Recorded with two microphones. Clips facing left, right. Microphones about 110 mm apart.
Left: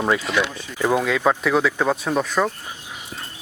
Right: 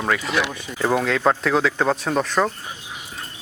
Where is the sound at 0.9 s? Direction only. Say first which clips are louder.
Even; 5° left (ahead or behind).